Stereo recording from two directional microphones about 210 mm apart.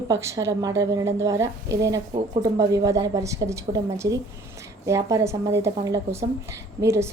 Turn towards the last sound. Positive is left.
turn(degrees=-15)  # may be behind; listen again after turning